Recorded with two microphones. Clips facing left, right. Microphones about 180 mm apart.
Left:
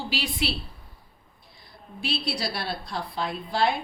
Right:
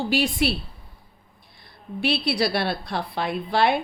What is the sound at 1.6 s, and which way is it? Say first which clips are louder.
A woman's voice: right 9 dB; 65° right (ahead or behind).